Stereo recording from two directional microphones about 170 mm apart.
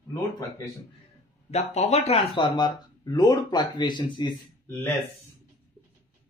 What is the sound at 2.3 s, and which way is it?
Speech, 25° left (ahead or behind).